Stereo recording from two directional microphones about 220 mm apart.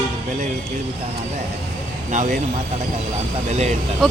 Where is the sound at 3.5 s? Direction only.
30° right (ahead or behind).